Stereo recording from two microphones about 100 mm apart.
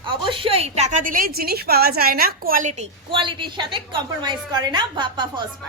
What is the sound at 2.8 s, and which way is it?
A woman's voice, 60° right (ahead or behind).